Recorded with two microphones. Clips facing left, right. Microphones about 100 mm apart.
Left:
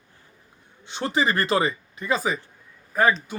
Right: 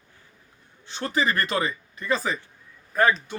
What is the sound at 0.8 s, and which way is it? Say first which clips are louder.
Speech: left 2 dB; 20° left (ahead or behind).